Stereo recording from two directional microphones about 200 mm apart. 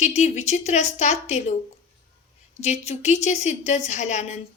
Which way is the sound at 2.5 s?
35° left (ahead or behind).